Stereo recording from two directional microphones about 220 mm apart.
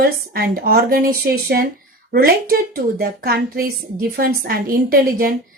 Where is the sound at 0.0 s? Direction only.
45° right (ahead or behind).